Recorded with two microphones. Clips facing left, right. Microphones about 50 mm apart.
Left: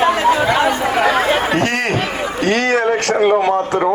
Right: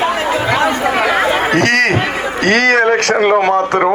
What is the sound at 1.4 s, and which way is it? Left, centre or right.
Chatter, right.